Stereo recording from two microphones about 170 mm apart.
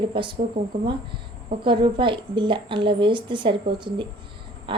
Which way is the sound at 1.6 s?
30° right (ahead or behind).